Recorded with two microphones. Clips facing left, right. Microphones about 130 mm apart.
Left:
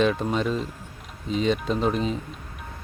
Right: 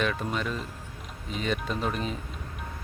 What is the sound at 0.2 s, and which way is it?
Speech, 30° left (ahead or behind).